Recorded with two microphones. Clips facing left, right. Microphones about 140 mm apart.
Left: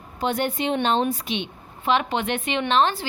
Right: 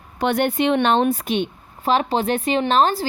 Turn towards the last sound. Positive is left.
turn(degrees=-35)  # may be behind; listen again after turning